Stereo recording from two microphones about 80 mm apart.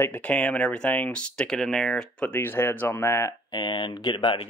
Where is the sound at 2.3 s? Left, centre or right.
Left.